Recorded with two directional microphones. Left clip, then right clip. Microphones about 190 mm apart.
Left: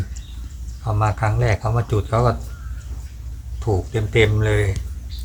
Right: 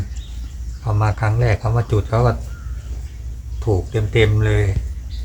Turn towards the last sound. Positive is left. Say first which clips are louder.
# even
turn(degrees=0)  # may be behind; listen again after turning